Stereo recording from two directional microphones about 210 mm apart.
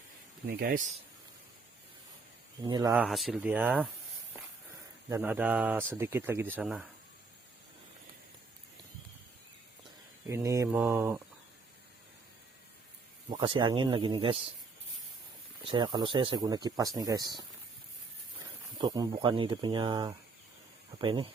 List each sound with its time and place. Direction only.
0.4 s speech: 45° right (ahead or behind)
2.6 s speech: 20° right (ahead or behind)
2.9 s speech: 5° right (ahead or behind)
5.0 s speech: 10° right (ahead or behind)
10.2 s speech: 15° right (ahead or behind)
13.3 s speech: 25° right (ahead or behind)
15.6 s speech: 20° right (ahead or behind)
18.8 s speech: 20° right (ahead or behind)